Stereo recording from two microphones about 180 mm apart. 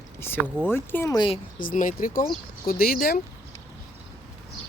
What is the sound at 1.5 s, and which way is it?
Speech, 50° left (ahead or behind).